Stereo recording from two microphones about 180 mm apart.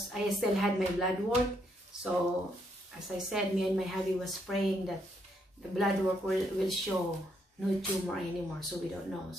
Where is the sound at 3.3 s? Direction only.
Centre (ahead or behind).